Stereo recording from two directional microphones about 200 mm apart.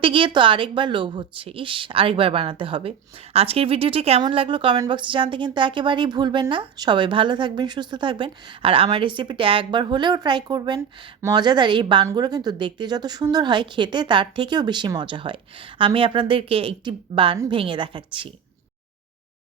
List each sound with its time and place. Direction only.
0.0 s a woman's voice: 25° right (ahead or behind)